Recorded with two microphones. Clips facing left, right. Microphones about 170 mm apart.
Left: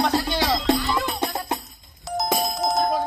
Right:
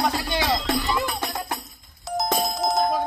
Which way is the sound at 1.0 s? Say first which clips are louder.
Left 2 dB; 20° left (ahead or behind).